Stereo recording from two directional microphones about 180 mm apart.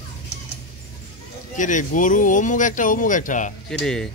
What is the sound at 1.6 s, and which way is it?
Speech, 45° left (ahead or behind).